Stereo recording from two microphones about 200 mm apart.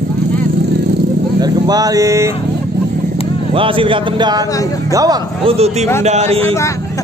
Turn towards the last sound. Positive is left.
turn(degrees=-30)  # may be behind; listen again after turning